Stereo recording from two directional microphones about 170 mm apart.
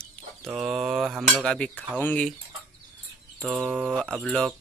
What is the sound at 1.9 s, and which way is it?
Speech, 10° left (ahead or behind).